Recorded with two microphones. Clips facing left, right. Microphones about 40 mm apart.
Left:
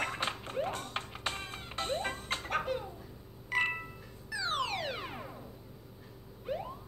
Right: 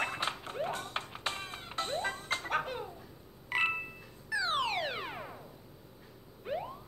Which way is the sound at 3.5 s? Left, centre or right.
Centre.